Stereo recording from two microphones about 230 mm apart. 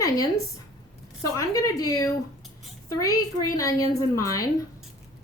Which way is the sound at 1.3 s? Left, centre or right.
Centre.